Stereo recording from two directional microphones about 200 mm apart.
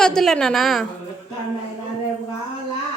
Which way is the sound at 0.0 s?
Centre (ahead or behind).